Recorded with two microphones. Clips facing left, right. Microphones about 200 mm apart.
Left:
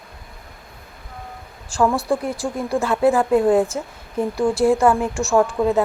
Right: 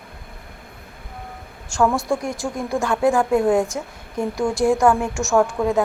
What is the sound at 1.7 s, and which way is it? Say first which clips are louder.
Speech: even; 35° left (ahead or behind).